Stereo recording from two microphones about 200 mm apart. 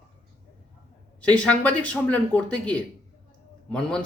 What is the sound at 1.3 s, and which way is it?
Speech, 5° left (ahead or behind).